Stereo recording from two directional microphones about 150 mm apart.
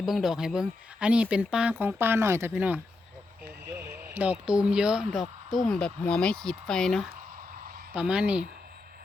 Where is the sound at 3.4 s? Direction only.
20° right (ahead or behind).